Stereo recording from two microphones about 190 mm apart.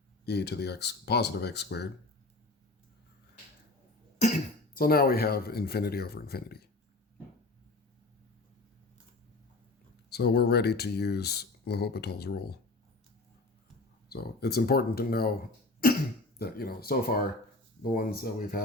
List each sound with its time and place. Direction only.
0.3 s speech: 60° left (ahead or behind)
4.7 s speech: 50° left (ahead or behind)
10.1 s speech: 60° left (ahead or behind)
14.1 s speech: 55° left (ahead or behind)
16.4 s speech: 55° left (ahead or behind)